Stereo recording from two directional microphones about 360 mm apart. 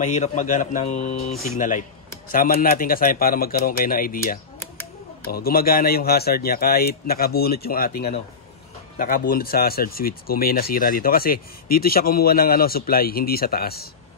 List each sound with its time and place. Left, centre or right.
0.0 s speech: centre